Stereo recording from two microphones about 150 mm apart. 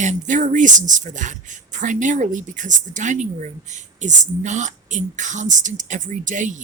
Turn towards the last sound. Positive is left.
turn(degrees=-55)  # may be behind; listen again after turning